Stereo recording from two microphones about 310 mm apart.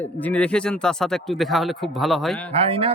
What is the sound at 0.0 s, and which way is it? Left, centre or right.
Speech, centre.